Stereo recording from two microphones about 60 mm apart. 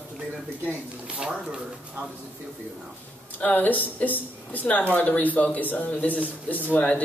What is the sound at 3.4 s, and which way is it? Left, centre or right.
Speech, left.